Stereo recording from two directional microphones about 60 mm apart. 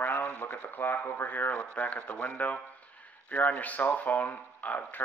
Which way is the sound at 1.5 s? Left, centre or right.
Left.